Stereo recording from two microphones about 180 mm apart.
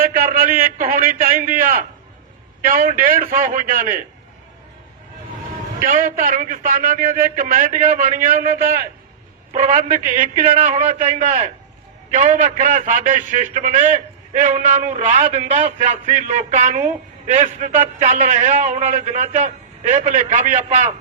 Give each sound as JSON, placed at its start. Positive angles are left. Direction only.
{"t": 0.0, "sound": "a man's voice", "side_deg": -50}
{"t": 5.8, "sound": "a man's voice", "side_deg": -50}
{"t": 9.5, "sound": "a man's voice", "side_deg": -35}